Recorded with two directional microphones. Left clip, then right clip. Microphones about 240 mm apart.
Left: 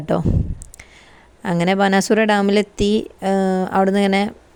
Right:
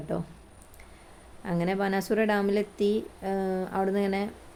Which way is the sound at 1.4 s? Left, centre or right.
Left.